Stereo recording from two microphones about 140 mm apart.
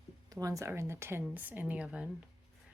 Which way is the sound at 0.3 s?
25° right (ahead or behind).